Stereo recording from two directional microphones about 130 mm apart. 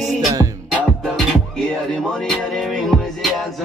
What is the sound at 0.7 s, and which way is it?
Music, 5° right (ahead or behind).